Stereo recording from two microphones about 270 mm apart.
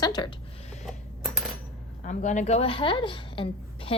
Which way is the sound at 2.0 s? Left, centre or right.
Left.